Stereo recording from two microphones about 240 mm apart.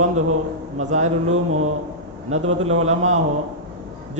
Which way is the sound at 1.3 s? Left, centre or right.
Right.